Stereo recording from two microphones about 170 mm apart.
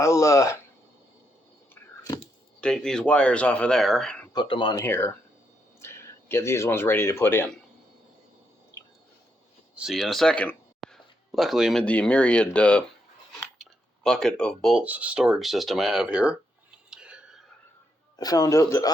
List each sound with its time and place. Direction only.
0.0 s speech: 15° left (ahead or behind)
2.6 s speech: 5° left (ahead or behind)
4.3 s speech: 25° left (ahead or behind)
4.8 s speech: 15° left (ahead or behind)
9.7 s speech: centre (ahead or behind)
16.9 s whispering: 5° right (ahead or behind)
18.2 s speech: 20° left (ahead or behind)